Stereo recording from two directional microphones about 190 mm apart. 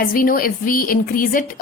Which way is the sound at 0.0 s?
50° left (ahead or behind).